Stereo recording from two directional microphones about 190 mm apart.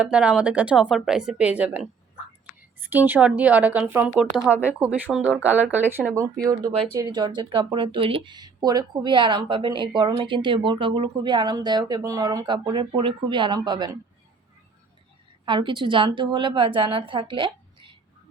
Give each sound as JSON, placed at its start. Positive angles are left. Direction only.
{"t": 0.0, "sound": "a woman's voice", "side_deg": -5}
{"t": 7.0, "sound": "speech", "side_deg": -20}
{"t": 15.4, "sound": "speech", "side_deg": -25}